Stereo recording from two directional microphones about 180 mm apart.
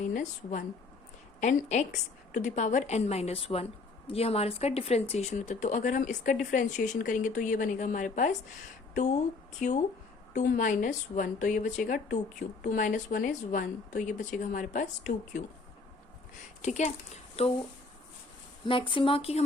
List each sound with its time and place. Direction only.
0.0 s a woman's voice: 45° left (ahead or behind)
9.6 s a woman's voice: 45° left (ahead or behind)
16.6 s a woman's voice: 40° left (ahead or behind)
18.7 s speech: 30° left (ahead or behind)